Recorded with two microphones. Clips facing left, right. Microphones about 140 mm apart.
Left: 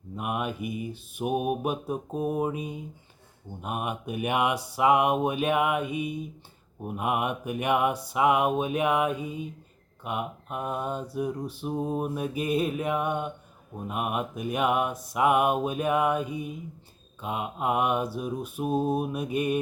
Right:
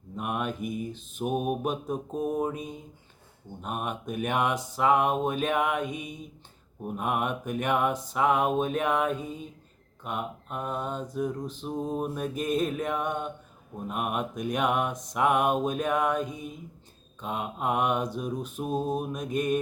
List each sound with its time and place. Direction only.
0.2 s mantra: 5° left (ahead or behind)